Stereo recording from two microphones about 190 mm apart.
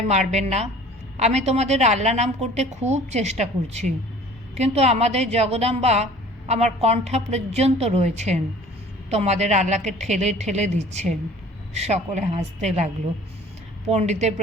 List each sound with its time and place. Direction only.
0.1 s a woman's voice: 35° right (ahead or behind)